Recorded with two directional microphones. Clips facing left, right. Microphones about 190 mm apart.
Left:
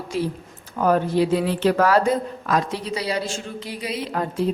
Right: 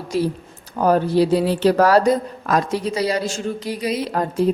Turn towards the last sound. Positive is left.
turn(degrees=-40)  # may be behind; listen again after turning